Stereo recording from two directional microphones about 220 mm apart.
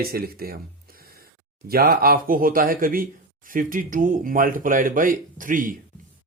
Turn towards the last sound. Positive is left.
turn(degrees=-35)  # may be behind; listen again after turning